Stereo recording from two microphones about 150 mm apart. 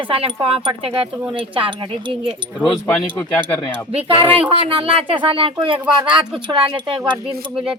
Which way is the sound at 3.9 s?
40° right (ahead or behind).